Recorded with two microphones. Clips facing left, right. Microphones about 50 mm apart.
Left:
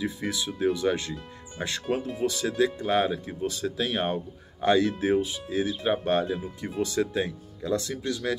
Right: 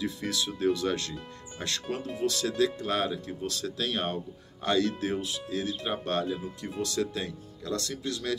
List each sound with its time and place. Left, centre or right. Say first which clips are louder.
0.0 s speech: left 2 dB; centre